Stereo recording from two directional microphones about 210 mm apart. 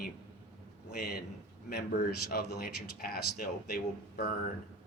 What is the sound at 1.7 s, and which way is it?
Speech, 50° left (ahead or behind).